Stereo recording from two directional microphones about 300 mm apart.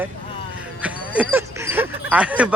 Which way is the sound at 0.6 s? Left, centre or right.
Centre.